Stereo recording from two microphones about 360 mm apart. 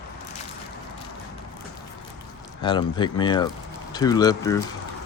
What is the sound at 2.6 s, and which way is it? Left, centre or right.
Speech, centre.